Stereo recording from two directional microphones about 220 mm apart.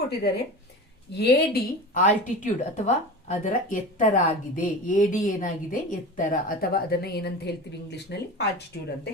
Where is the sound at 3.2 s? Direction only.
35° left (ahead or behind).